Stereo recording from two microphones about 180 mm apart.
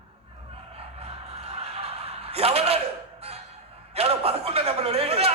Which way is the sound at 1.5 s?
35° right (ahead or behind).